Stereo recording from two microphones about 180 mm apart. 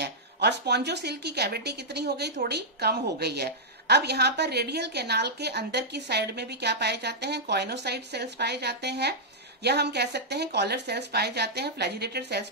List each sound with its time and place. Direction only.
0.0 s speech: 65° right (ahead or behind)